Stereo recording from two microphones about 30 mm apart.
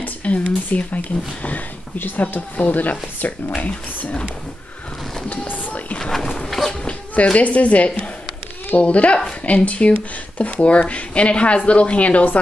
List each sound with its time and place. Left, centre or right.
0.2 s speech: left
2.5 s speech: left
5.5 s boat: left
6.1 s a sound: centre
7.3 s speech: left